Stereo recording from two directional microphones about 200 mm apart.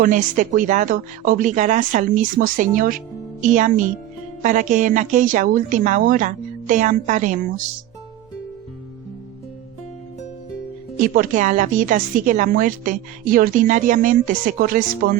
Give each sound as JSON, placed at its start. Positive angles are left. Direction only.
{"t": 0.0, "sound": "a woman's voice", "side_deg": -40}
{"t": 11.0, "sound": "speech", "side_deg": -45}